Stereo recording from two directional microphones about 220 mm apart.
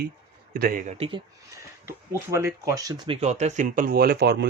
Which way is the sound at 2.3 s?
10° right (ahead or behind).